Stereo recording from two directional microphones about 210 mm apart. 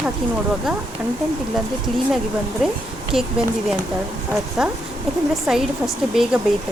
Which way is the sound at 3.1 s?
Centre (ahead or behind).